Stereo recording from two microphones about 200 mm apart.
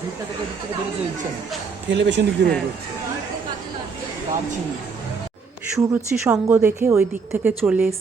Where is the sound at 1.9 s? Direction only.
60° right (ahead or behind).